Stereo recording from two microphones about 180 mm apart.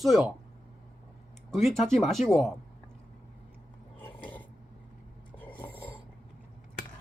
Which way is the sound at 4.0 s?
10° left (ahead or behind).